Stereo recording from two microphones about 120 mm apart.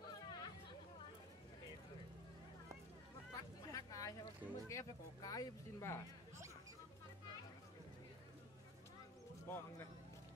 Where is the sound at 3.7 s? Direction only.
30° left (ahead or behind).